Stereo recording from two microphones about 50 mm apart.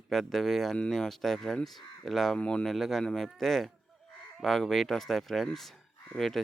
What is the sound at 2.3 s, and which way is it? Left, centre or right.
Speech, left.